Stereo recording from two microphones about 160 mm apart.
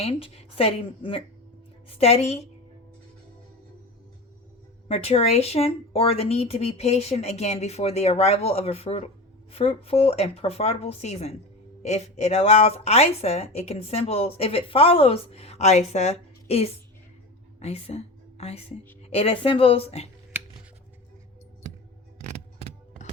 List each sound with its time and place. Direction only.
0.0 s speech: 40° left (ahead or behind)
4.9 s a woman's voice: 40° left (ahead or behind)
22.2 s a sound: 45° right (ahead or behind)